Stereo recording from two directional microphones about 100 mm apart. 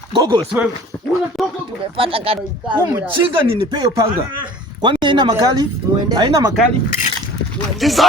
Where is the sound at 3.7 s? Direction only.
45° right (ahead or behind).